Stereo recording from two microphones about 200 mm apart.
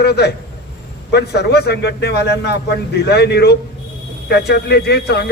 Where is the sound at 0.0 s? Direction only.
55° left (ahead or behind).